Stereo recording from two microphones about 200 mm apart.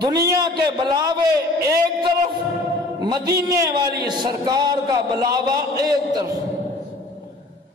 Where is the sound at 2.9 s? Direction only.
20° right (ahead or behind).